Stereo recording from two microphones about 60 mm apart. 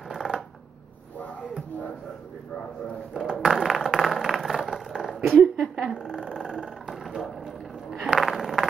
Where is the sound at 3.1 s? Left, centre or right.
Centre.